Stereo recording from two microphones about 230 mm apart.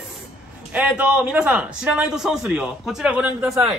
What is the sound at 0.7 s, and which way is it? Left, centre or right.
A man's voice, centre.